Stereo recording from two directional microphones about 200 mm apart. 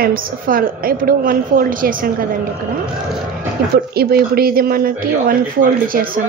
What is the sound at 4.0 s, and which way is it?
A woman's voice, 50° right (ahead or behind).